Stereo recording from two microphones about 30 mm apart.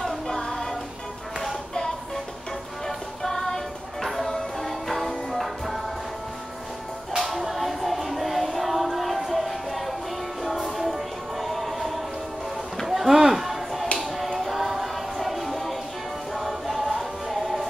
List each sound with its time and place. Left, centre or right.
0.3 s a sound: centre
3.2 s music: centre
7.2 s music: centre
12.8 s a sound: centre
14.4 s music: centre
16.3 s choir: centre